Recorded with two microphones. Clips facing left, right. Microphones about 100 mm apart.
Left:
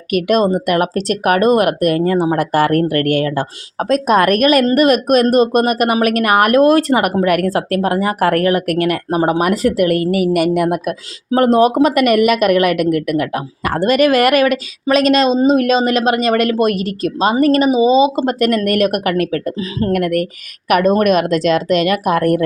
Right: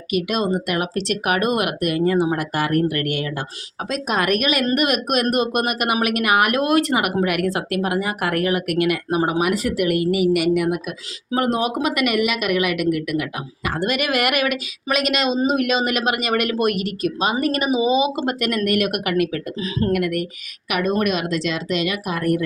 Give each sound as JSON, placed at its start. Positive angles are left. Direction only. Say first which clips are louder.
{"t": 0.1, "sound": "speech", "louder": "left 7 dB", "side_deg": 50}
{"t": 10.1, "sound": "a woman's voice", "louder": "left 3 dB", "side_deg": -5}
{"t": 10.7, "sound": "speech", "louder": "left 5 dB", "side_deg": 45}